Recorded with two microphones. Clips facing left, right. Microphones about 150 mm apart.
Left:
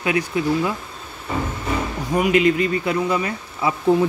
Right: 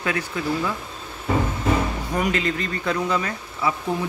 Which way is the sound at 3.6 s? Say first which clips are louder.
Left 2 dB; 20° left (ahead or behind).